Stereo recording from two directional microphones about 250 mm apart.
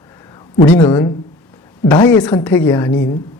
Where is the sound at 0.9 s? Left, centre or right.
Centre.